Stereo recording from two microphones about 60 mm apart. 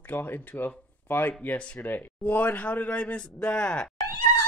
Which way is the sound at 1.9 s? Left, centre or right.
Left.